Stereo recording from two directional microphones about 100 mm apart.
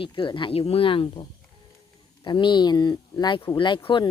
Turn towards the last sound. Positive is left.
turn(degrees=55)  # may be behind; listen again after turning